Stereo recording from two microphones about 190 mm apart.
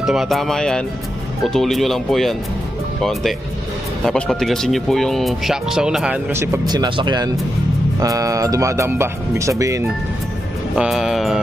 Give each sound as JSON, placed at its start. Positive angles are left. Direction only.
{"t": 0.0, "sound": "speech", "side_deg": 0}
{"t": 10.8, "sound": "speech", "side_deg": 0}